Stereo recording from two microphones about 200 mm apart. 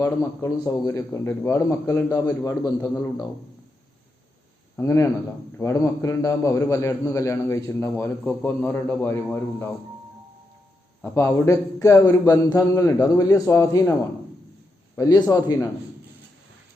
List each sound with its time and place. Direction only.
0.0 s a man's voice: 15° left (ahead or behind)
4.8 s a man's voice: 15° left (ahead or behind)
11.0 s a man's voice: 15° left (ahead or behind)
14.9 s a man's voice: 15° left (ahead or behind)